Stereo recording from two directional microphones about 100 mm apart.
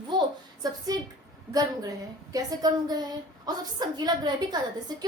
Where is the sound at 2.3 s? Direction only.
40° right (ahead or behind).